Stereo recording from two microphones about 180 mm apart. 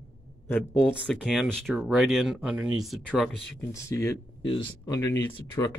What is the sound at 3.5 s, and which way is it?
Speech, 15° left (ahead or behind).